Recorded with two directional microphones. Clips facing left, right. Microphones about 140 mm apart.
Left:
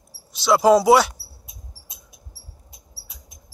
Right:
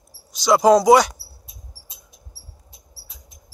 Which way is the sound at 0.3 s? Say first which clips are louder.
Right 1 dB; centre (ahead or behind).